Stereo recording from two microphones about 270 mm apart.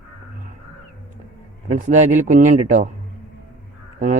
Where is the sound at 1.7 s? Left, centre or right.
Right.